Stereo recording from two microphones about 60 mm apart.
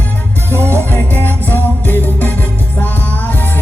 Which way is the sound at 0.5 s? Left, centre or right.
Left.